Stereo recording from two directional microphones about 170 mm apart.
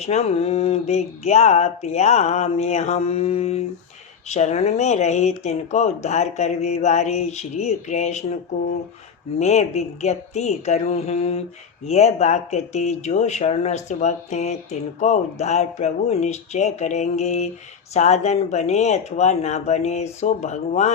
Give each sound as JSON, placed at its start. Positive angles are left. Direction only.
{"t": 0.0, "sound": "speech", "side_deg": 40}
{"t": 9.4, "sound": "speech", "side_deg": 40}